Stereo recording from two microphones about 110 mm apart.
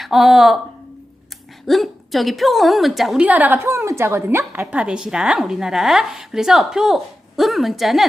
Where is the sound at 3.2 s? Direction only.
15° right (ahead or behind).